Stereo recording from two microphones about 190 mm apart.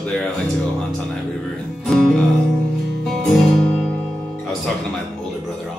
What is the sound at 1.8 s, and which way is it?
Music, centre (ahead or behind).